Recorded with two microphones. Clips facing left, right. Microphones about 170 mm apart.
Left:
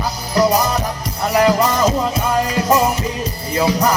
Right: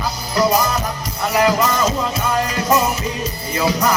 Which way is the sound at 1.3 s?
35° left (ahead or behind).